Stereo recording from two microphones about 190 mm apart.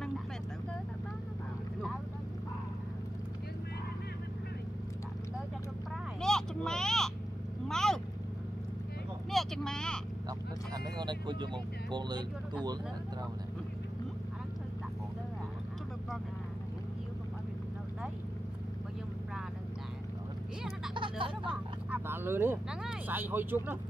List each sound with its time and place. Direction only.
6.2 s vehicle: 5° left (ahead or behind)
9.3 s speech: centre (ahead or behind)
10.7 s speech: 20° right (ahead or behind)
20.9 s a sound: 25° right (ahead or behind)
21.5 s speech: 10° right (ahead or behind)